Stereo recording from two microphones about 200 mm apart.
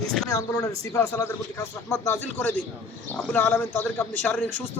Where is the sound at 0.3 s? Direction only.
15° left (ahead or behind).